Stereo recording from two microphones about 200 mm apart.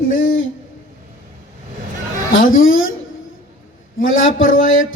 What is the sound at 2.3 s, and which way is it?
Speech, 80° left.